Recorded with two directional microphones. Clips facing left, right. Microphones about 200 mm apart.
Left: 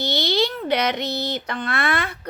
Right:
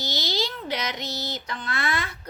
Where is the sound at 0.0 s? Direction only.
60° left (ahead or behind).